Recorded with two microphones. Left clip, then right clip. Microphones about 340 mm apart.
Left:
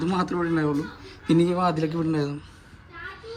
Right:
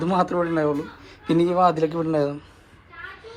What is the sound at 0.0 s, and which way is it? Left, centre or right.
Speech, centre.